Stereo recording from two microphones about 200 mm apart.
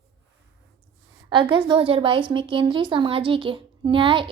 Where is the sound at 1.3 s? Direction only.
25° right (ahead or behind).